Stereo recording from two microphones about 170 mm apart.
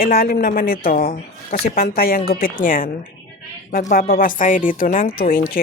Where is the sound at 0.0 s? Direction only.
60° left (ahead or behind).